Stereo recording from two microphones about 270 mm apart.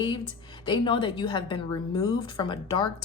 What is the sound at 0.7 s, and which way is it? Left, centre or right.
A woman's voice, centre.